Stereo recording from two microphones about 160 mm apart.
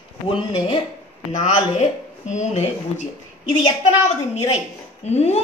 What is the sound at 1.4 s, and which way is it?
Speech, 50° left (ahead or behind).